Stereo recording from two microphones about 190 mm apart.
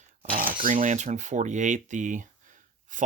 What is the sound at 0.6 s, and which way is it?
Speech, 40° right (ahead or behind).